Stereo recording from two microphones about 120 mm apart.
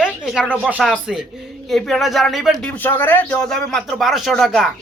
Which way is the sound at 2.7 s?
15° left (ahead or behind).